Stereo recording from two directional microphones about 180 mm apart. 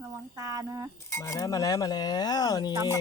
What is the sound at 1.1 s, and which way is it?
Cutlery, 15° left (ahead or behind).